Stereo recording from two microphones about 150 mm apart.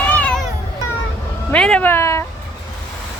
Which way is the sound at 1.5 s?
5° left (ahead or behind).